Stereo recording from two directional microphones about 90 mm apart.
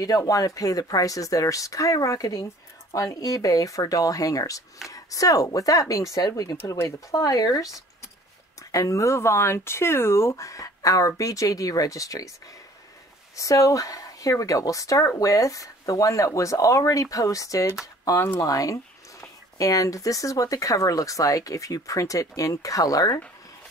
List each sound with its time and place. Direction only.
0.6 s speech: 40° left (ahead or behind)
13.4 s speech: 35° left (ahead or behind)